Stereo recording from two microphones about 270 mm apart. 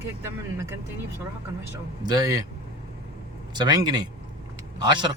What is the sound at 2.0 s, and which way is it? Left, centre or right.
Speech, centre.